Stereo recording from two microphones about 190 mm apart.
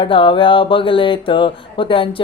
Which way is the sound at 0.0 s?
25° left (ahead or behind).